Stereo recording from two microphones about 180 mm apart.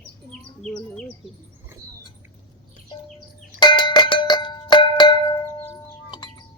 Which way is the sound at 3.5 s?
25° left (ahead or behind).